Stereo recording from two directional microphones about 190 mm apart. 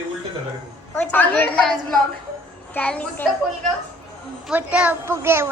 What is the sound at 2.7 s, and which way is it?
Speech, 10° left (ahead or behind).